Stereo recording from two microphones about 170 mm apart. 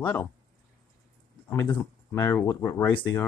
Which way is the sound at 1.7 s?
15° left (ahead or behind).